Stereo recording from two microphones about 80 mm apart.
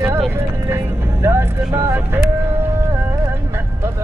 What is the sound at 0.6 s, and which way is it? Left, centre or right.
Music, right.